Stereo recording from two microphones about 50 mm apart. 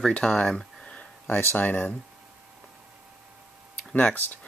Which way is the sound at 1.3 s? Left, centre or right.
Left.